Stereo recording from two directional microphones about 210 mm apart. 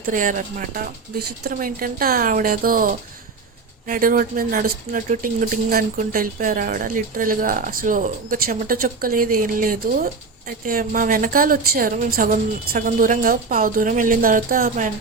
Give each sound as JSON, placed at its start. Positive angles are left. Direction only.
{"t": 0.0, "sound": "speech", "side_deg": -40}